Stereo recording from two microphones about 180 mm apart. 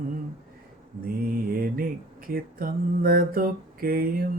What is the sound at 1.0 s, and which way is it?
Mantra, 55° right (ahead or behind).